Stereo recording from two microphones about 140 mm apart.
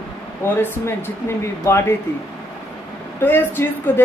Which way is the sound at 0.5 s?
15° left (ahead or behind).